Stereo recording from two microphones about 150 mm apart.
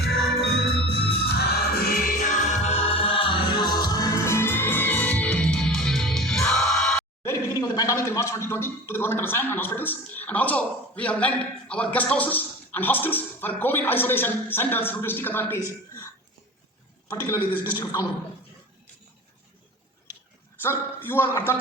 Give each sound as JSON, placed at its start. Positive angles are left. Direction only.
{"t": 0.9, "sound": "music", "side_deg": 90}
{"t": 7.2, "sound": "speech", "side_deg": 25}
{"t": 17.2, "sound": "a man's voice", "side_deg": 20}
{"t": 17.7, "sound": "a man's voice", "side_deg": 30}
{"t": 20.6, "sound": "a man's voice", "side_deg": 15}